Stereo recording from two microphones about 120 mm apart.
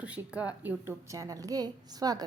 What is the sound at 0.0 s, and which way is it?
A woman's voice, 10° right (ahead or behind).